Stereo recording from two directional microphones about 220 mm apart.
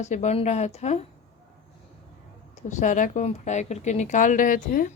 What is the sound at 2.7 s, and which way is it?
Speech, 35° left (ahead or behind).